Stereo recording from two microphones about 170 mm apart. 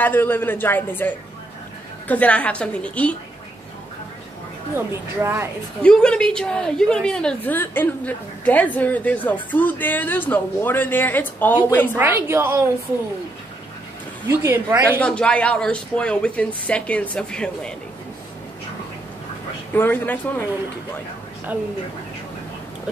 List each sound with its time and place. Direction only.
0.0 s a woman's voice: 10° left (ahead or behind)
4.7 s a woman's voice: 15° right (ahead or behind)
5.8 s a woman's voice: 5° left (ahead or behind)
12.0 s a woman's voice: 10° right (ahead or behind)
14.4 s a woman's voice: 15° right (ahead or behind)
15.0 s a woman's voice: 5° left (ahead or behind)
19.7 s a woman's voice: 10° left (ahead or behind)